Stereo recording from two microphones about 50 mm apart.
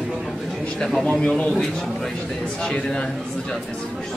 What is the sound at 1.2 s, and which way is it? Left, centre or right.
Speech, left.